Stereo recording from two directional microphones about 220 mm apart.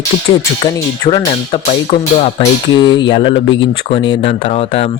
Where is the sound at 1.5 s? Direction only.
30° left (ahead or behind).